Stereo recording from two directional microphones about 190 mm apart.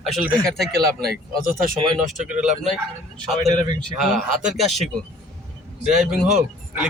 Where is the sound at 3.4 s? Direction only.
25° right (ahead or behind).